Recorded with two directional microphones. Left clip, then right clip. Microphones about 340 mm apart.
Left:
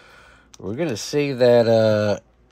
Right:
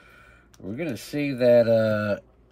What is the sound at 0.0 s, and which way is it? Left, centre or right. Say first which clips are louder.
Speech: left 4 dB; left.